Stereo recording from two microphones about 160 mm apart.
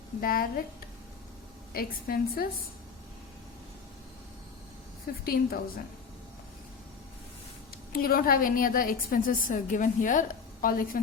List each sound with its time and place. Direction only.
0.2 s a woman's voice: 65° left (ahead or behind)
1.7 s a woman's voice: 65° left (ahead or behind)
5.2 s a woman's voice: 65° left (ahead or behind)
7.9 s a woman's voice: 65° left (ahead or behind)